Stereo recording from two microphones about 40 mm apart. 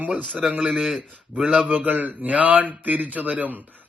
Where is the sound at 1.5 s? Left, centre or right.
Right.